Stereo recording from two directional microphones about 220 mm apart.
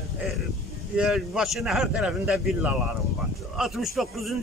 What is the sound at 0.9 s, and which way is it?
A man's voice, 5° right (ahead or behind).